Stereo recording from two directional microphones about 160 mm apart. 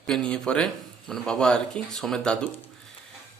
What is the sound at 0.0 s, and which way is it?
Speech, 5° left (ahead or behind).